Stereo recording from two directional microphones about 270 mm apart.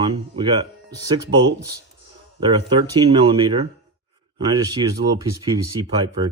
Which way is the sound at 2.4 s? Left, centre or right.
Centre.